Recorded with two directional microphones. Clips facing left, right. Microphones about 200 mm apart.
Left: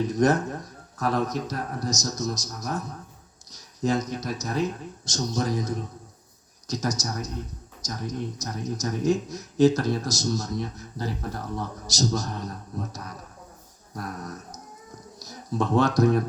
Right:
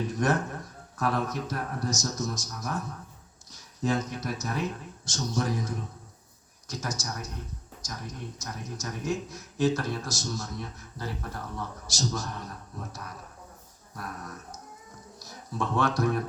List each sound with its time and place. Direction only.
0.1 s a man's voice: 40° left (ahead or behind)
3.8 s a man's voice: 40° left (ahead or behind)